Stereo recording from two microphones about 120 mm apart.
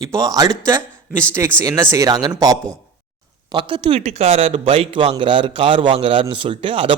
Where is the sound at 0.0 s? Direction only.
30° right (ahead or behind).